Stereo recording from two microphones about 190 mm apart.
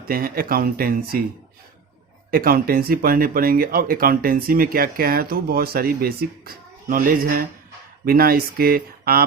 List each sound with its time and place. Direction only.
0.1 s speech: 50° right (ahead or behind)
2.3 s speech: 50° right (ahead or behind)